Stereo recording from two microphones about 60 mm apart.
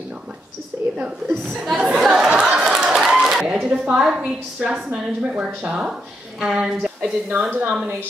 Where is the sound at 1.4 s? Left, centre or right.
Centre.